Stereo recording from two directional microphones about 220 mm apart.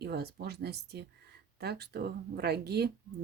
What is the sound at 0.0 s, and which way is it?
Speech, 45° right (ahead or behind).